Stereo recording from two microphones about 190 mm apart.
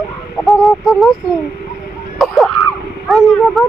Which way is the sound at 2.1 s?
Centre (ahead or behind).